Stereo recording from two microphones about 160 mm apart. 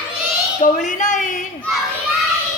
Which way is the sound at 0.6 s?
50° left (ahead or behind).